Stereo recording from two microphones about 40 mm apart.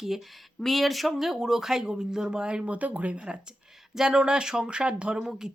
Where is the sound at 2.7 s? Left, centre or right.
Right.